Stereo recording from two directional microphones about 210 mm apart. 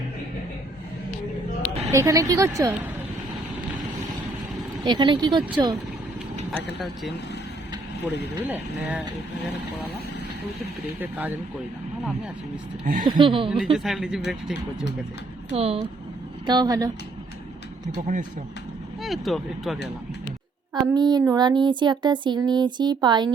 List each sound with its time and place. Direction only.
1.9 s speech: 15° right (ahead or behind)
4.8 s speech: 20° right (ahead or behind)
6.7 s speech: centre (ahead or behind)
11.0 s speech: 10° right (ahead or behind)
12.8 s speech: 40° right (ahead or behind)
13.1 s speech: 25° right (ahead or behind)
13.7 s speech: centre (ahead or behind)
15.5 s speech: 30° right (ahead or behind)
17.9 s speech: 40° right (ahead or behind)
19.0 s speech: centre (ahead or behind)
20.7 s speech: 20° right (ahead or behind)